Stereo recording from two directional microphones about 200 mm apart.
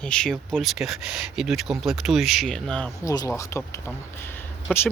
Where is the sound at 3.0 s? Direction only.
15° left (ahead or behind).